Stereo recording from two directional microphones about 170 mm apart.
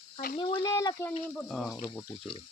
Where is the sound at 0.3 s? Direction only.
30° left (ahead or behind).